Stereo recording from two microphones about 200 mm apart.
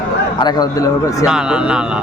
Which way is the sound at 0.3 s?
20° left (ahead or behind).